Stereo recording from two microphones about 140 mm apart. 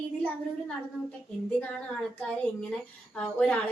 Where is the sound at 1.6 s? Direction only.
10° left (ahead or behind).